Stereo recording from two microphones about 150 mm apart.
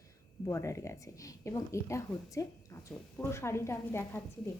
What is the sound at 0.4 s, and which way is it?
Speech, 20° left (ahead or behind).